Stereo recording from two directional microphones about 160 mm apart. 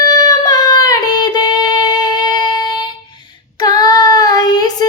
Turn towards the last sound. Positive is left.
turn(degrees=25)  # may be behind; listen again after turning